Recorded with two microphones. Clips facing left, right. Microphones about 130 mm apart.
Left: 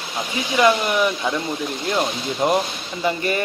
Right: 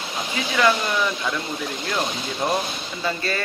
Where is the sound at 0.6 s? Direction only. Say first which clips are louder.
Left 4 dB; 20° left (ahead or behind).